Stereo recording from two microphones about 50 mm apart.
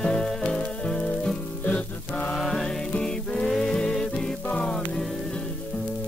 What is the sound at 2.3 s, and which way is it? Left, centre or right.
Music, centre.